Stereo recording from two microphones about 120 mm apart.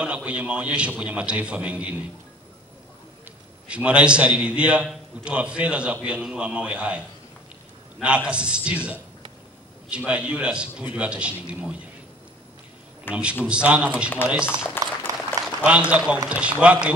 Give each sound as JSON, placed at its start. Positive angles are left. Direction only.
{"t": 0.0, "sound": "a man's voice", "side_deg": -10}
{"t": 3.6, "sound": "a man's voice", "side_deg": -10}
{"t": 8.0, "sound": "a man's voice", "side_deg": -10}
{"t": 13.1, "sound": "a man's voice", "side_deg": -10}
{"t": 15.1, "sound": "applause", "side_deg": -30}
{"t": 15.4, "sound": "a man's voice", "side_deg": -10}